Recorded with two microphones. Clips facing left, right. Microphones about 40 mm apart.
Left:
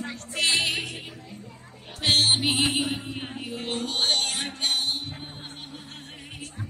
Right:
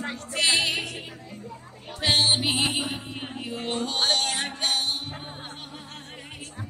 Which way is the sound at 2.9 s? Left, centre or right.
Centre.